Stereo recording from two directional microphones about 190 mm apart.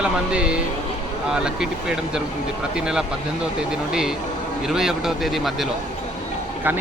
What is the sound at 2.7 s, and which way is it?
Speech, 5° right (ahead or behind).